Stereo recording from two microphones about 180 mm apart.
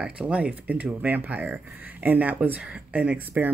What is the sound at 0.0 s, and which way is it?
Speech, 5° right (ahead or behind).